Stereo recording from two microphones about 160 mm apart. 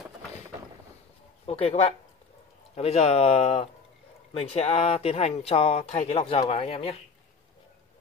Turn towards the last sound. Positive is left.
turn(degrees=40)  # may be behind; listen again after turning